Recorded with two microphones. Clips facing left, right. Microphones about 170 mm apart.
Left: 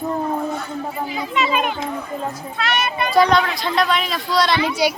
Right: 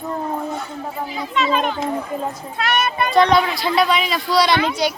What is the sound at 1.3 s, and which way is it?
Speech, 10° left (ahead or behind).